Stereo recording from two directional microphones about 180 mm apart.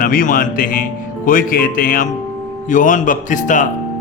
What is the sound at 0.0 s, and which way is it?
A man's voice, 50° left (ahead or behind).